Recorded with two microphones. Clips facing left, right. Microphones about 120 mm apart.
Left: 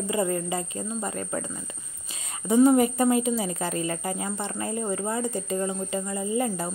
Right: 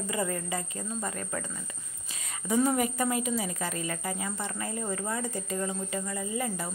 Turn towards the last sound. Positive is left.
turn(degrees=35)  # may be behind; listen again after turning